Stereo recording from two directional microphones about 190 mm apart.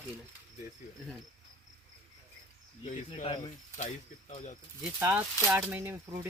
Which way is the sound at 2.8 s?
30° left (ahead or behind).